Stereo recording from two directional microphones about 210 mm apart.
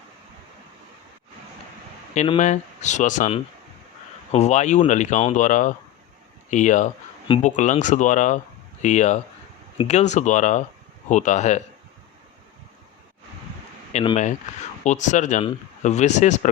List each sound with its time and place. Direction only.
2.1 s speech: 25° left (ahead or behind)
2.4 s speech: 35° left (ahead or behind)
13.9 s speech: 30° left (ahead or behind)